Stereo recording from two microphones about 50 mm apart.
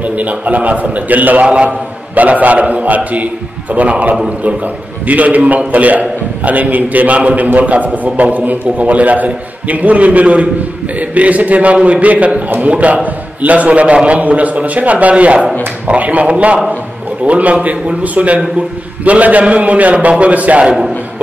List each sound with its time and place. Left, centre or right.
0.0 s a man's voice: right